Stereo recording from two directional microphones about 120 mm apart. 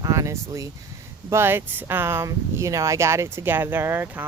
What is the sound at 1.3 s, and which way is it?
Speech, 20° right (ahead or behind).